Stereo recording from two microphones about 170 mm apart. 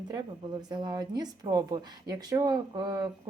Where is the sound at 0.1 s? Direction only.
25° right (ahead or behind).